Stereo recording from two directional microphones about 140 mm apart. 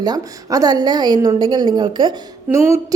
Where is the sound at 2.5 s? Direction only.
20° right (ahead or behind).